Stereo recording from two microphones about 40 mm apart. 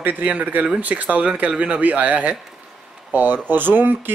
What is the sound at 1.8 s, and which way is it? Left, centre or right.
Speech, right.